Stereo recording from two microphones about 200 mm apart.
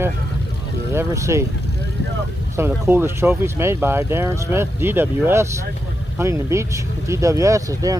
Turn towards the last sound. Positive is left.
turn(degrees=-15)  # may be behind; listen again after turning